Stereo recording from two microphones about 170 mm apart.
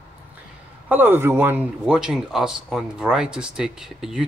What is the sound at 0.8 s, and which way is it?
Speech, 10° right (ahead or behind).